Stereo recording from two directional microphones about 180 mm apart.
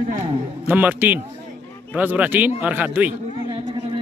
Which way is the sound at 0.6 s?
10° right (ahead or behind).